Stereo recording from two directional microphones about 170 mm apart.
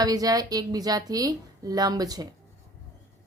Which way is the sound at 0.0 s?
20° right (ahead or behind).